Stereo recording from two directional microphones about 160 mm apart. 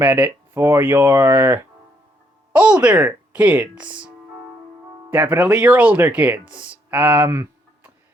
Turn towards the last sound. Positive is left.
turn(degrees=-15)  # may be behind; listen again after turning